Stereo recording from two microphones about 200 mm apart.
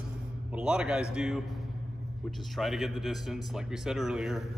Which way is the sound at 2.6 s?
Centre (ahead or behind).